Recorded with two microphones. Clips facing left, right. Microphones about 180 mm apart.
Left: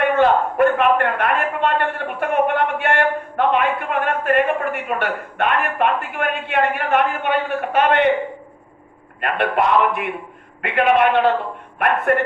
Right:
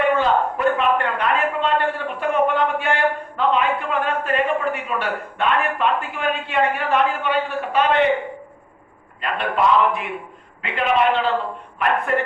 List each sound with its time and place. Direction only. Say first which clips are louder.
0.2 s a man's voice: left 4 dB; 60° left (ahead or behind)
9.2 s a man's voice: left 1 dB; 60° left (ahead or behind)